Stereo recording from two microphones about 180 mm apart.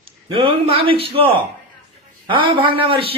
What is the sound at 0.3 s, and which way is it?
Speech, 30° right (ahead or behind).